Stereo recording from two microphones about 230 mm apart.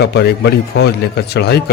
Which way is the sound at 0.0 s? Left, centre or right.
Left.